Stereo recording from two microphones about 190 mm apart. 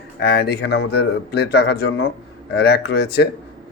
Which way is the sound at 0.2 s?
55° left (ahead or behind).